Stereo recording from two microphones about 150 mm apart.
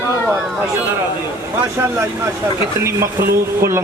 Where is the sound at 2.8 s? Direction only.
20° right (ahead or behind).